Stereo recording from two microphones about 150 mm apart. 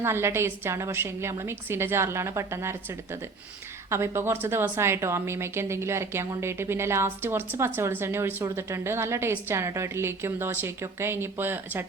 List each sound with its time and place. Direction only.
0.0 s a woman's voice: 15° right (ahead or behind)
3.8 s a woman's voice: 15° right (ahead or behind)